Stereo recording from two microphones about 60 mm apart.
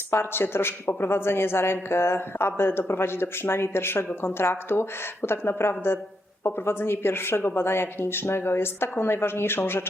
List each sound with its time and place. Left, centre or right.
0.1 s speech: left